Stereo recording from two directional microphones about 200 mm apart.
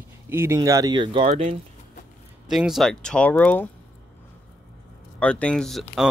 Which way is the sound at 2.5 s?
Centre (ahead or behind).